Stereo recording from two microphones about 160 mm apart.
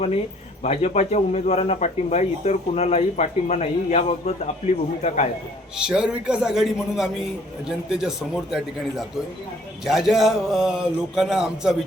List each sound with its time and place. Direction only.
0.6 s speech: 40° left (ahead or behind)
5.7 s speech: 5° right (ahead or behind)